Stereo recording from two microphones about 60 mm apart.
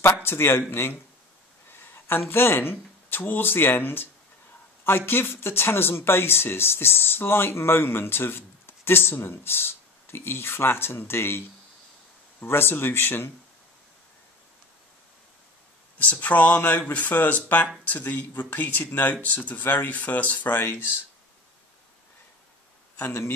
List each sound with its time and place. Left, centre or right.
0.0 s a man's voice: left
2.0 s speech: left
12.4 s speech: left
16.0 s speech: left
22.9 s speech: left